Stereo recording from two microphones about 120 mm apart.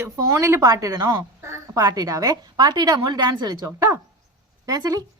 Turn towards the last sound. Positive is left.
turn(degrees=-30)  # may be behind; listen again after turning